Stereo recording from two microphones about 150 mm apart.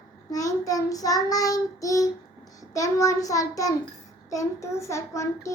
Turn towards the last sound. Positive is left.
turn(degrees=20)  # may be behind; listen again after turning